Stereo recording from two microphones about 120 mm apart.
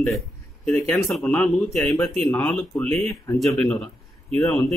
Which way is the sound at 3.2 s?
25° left (ahead or behind).